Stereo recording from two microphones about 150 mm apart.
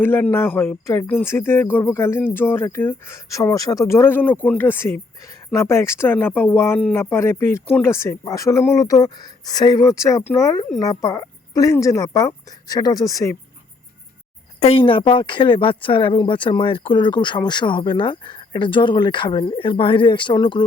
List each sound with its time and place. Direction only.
0.0 s speech: 15° left (ahead or behind)
14.6 s speech: 40° left (ahead or behind)